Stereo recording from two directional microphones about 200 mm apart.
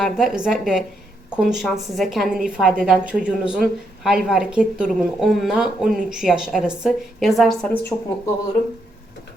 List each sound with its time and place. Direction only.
0.0 s a woman's voice: centre (ahead or behind)
7.9 s speech: 10° left (ahead or behind)